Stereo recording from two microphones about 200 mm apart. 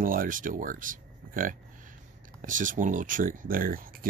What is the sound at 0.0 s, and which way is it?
Speech, 45° right (ahead or behind).